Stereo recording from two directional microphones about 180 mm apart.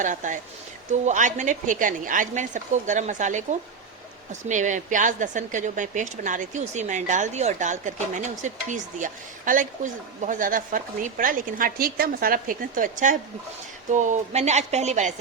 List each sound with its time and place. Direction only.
0.0 s a woman's voice: 45° right (ahead or behind)